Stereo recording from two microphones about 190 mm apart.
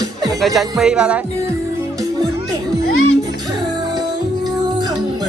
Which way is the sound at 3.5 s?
20° right (ahead or behind).